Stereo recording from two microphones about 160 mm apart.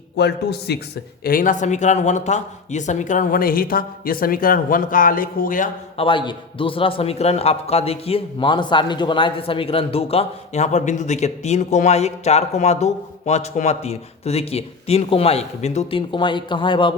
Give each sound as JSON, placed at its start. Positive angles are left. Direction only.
{"t": 0.2, "sound": "a man's voice", "side_deg": 90}
{"t": 1.2, "sound": "a man's voice", "side_deg": 60}
{"t": 6.0, "sound": "a man's voice", "side_deg": 30}